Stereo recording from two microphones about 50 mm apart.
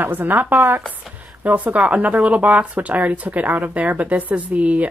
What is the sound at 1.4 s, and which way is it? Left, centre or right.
Speech, right.